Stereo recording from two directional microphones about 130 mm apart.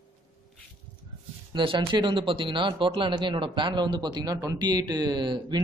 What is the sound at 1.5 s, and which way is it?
Speech, 40° right (ahead or behind).